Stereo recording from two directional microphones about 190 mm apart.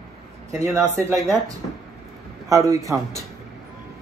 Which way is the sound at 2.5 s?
15° right (ahead or behind).